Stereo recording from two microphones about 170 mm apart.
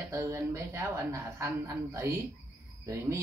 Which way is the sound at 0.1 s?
15° right (ahead or behind).